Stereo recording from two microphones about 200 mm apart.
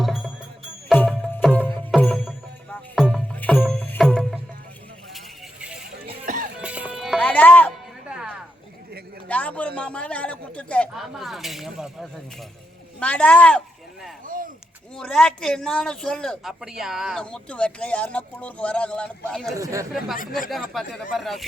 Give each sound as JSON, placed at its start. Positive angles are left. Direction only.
{"t": 0.0, "sound": "music", "side_deg": 0}
{"t": 5.1, "sound": "vehicle", "side_deg": -5}
{"t": 6.2, "sound": "music", "side_deg": -40}
{"t": 6.6, "sound": "music", "side_deg": -5}
{"t": 8.0, "sound": "music", "side_deg": -5}
{"t": 9.3, "sound": "a sound", "side_deg": 5}
{"t": 13.0, "sound": "speech", "side_deg": 5}
{"t": 14.3, "sound": "a sound", "side_deg": -45}
{"t": 14.9, "sound": "speech", "side_deg": 5}
{"t": 19.5, "sound": "speech", "side_deg": -15}
{"t": 20.7, "sound": "speech", "side_deg": 0}